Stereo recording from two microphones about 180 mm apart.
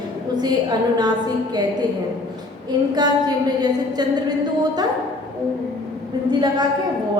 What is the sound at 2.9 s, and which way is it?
A woman's voice, 20° right (ahead or behind).